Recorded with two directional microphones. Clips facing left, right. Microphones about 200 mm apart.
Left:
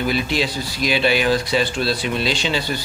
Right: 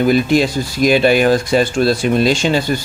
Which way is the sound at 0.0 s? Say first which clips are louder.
Right 8 dB; 45° right (ahead or behind).